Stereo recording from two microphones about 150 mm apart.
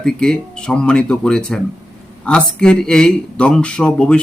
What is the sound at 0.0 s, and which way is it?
Speech, 5° left (ahead or behind).